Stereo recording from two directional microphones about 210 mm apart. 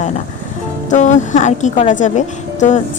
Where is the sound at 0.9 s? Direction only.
35° left (ahead or behind).